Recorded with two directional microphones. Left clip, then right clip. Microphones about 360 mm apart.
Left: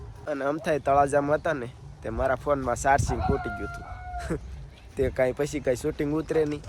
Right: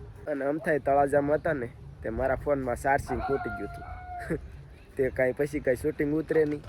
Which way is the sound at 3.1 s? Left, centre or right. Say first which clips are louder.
Left 1 dB; left.